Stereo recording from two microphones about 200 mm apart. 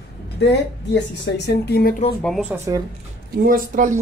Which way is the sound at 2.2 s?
Centre (ahead or behind).